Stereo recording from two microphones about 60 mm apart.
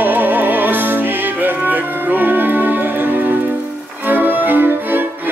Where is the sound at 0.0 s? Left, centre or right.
Right.